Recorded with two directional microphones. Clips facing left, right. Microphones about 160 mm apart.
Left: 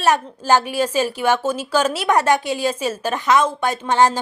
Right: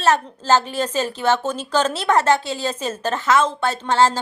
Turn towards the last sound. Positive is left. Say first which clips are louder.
# left 1 dB
turn(degrees=15)  # may be behind; listen again after turning